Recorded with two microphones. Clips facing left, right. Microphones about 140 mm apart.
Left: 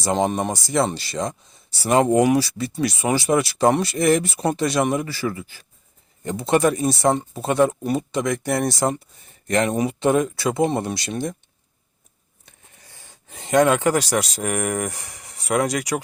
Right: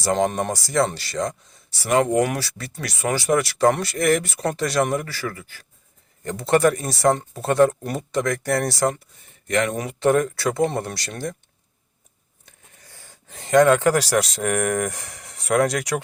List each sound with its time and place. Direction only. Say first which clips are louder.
0.0 s speech: even; 20° left (ahead or behind)
0.3 s speech: left 1 dB; 5° left (ahead or behind)
0.5 s speech: even; 20° left (ahead or behind)
2.2 s speech: left 7 dB; 15° left (ahead or behind)
7.1 s speech: even; 10° left (ahead or behind)
9.5 s speech: left 1 dB; 35° left (ahead or behind)
9.7 s speech: left 1 dB; 20° left (ahead or behind)
13.4 s speech: right 2 dB; 15° left (ahead or behind)
13.9 s speech: right 1 dB; centre (ahead or behind)